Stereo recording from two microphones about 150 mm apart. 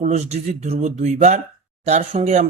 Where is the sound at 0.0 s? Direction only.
45° right (ahead or behind).